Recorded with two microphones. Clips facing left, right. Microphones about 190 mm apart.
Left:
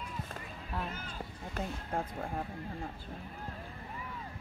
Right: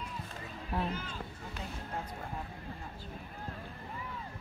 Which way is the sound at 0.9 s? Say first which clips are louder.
Right 2 dB; 50° left (ahead or behind).